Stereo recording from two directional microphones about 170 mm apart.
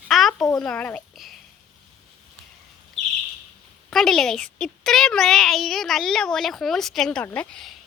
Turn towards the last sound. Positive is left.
turn(degrees=5)  # may be behind; listen again after turning